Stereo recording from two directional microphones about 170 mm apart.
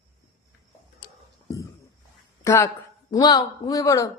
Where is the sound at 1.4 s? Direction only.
20° left (ahead or behind).